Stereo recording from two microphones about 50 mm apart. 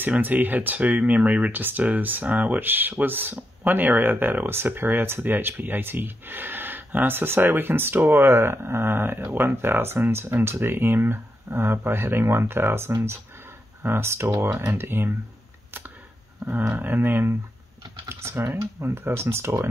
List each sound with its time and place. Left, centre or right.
0.2 s speech: right
14.6 s speech: right
14.9 s speech: right
16.4 s speech: right
18.0 s speech: right